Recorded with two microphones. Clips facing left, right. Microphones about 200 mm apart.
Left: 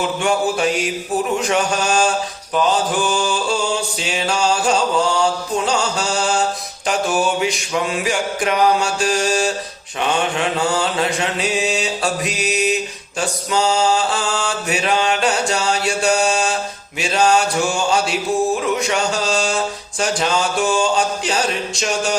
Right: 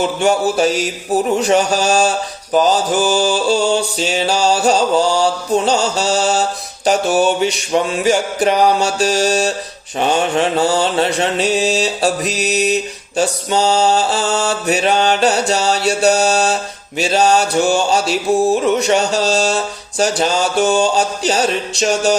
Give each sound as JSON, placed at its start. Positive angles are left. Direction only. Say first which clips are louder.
{"t": 0.2, "sound": "mantra", "louder": "right 4 dB", "side_deg": -35}